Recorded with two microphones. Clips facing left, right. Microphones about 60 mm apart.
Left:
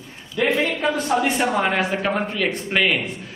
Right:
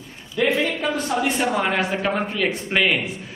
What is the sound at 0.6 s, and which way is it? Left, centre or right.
A man's voice, centre.